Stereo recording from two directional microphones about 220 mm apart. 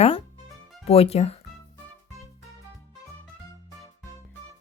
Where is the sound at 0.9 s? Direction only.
25° left (ahead or behind).